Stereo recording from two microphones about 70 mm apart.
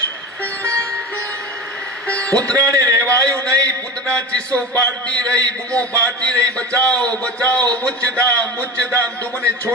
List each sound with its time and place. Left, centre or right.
2.0 s speech: centre
2.7 s speech: right
4.0 s a man's voice: centre